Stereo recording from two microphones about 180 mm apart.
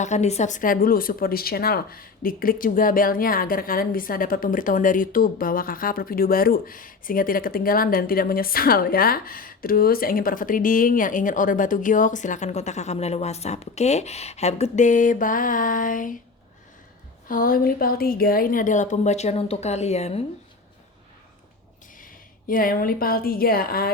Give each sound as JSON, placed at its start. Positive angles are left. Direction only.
{"t": 0.0, "sound": "speech", "side_deg": 40}
{"t": 17.2, "sound": "speech", "side_deg": 50}
{"t": 22.0, "sound": "a woman's voice", "side_deg": 50}